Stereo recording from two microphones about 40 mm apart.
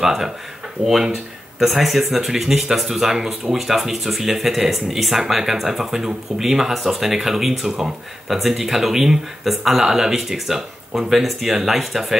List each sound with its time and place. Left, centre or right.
0.0 s speech: centre